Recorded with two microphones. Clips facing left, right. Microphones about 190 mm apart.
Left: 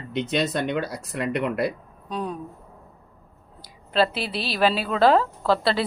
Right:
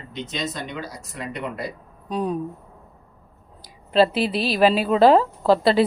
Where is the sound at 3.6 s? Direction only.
35° right (ahead or behind).